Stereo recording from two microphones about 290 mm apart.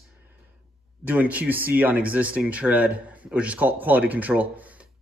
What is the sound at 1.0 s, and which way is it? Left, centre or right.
Speech, centre.